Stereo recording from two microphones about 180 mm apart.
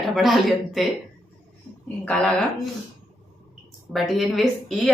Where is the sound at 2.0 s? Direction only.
5° left (ahead or behind).